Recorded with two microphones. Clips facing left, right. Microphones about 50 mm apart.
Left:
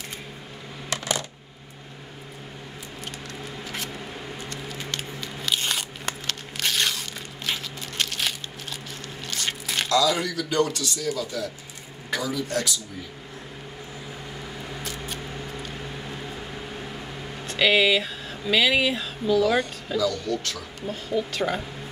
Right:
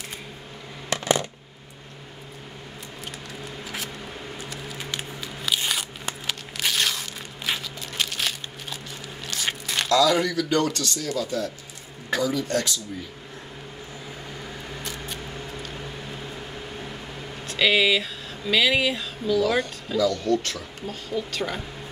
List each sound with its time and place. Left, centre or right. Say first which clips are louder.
0.8 s coin: right 5 dB; right
4.4 s scissors: even; centre
6.2 s a sound: right 2 dB; centre
9.3 s biting: right 1 dB; centre
10.0 s speech: right 3 dB; centre
10.8 s speech: even; right
12.1 s a sound: right 4 dB; centre
14.7 s a sound: left 1 dB; centre
17.5 s speech: even; centre
20.0 s speech: right 4 dB; right
20.9 s speech: left 3 dB; centre